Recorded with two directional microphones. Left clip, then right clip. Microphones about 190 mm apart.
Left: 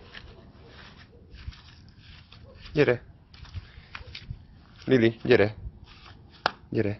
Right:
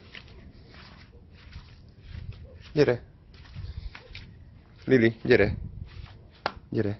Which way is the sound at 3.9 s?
60° left (ahead or behind).